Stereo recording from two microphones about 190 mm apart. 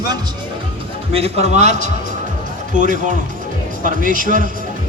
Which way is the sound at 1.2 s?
35° right (ahead or behind).